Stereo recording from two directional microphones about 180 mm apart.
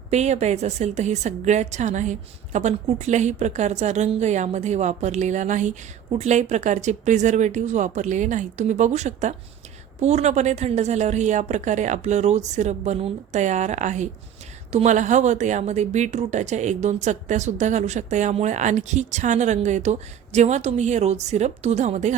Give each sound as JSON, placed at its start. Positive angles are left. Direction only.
{"t": 0.1, "sound": "a woman's voice", "side_deg": -40}